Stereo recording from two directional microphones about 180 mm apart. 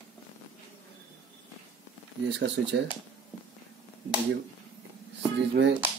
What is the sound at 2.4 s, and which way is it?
Speech, 75° right (ahead or behind).